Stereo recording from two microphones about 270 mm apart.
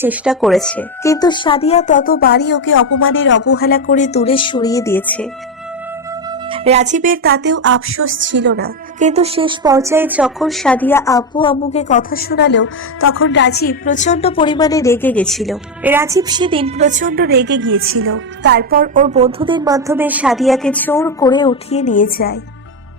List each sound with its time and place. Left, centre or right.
0.0 s speech: centre
6.5 s music: right; by 22.4 s left